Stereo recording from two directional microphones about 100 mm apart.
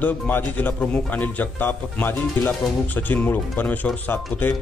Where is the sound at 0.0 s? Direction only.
20° left (ahead or behind).